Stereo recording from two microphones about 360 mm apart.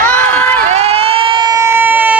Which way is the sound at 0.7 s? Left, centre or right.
Centre.